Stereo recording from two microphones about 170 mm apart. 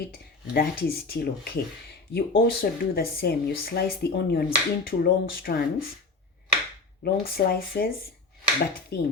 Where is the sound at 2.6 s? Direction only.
65° left (ahead or behind).